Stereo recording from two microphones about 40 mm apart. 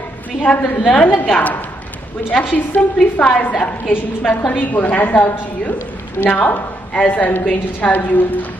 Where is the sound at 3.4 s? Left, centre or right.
Left.